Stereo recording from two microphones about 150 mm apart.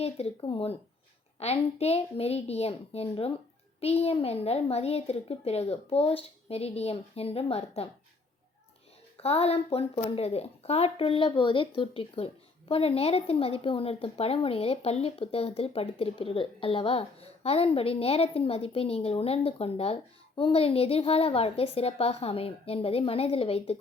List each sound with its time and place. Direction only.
0.0 s a child's voice: 40° left (ahead or behind)
9.2 s speech: 40° left (ahead or behind)